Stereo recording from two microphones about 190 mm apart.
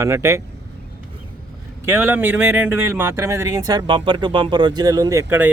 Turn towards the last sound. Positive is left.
turn(degrees=-10)  # may be behind; listen again after turning